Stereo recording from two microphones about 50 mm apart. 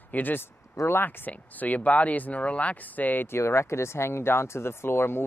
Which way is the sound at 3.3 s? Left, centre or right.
Left.